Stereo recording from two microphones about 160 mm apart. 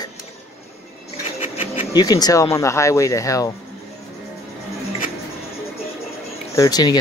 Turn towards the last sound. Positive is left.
turn(degrees=25)  # may be behind; listen again after turning